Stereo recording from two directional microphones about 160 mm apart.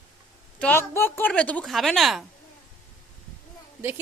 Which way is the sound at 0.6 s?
15° left (ahead or behind).